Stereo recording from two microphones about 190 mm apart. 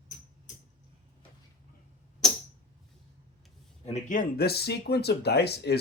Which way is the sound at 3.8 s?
40° left (ahead or behind).